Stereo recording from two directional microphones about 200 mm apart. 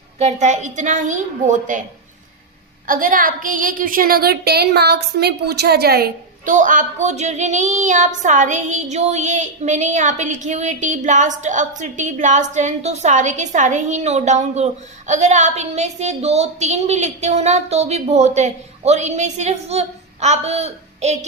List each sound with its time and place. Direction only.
0.2 s a woman's voice: 35° right (ahead or behind)
2.8 s a woman's voice: 45° right (ahead or behind)